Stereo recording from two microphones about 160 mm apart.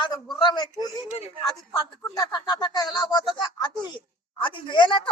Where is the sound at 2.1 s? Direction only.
25° left (ahead or behind).